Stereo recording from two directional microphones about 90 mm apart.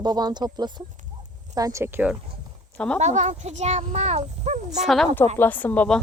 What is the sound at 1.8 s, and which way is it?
Speech, 25° right (ahead or behind).